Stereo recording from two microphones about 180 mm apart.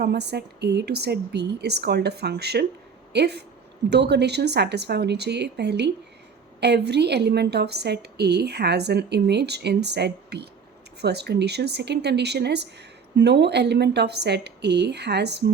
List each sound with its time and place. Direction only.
0.0 s a woman's voice: 65° right (ahead or behind)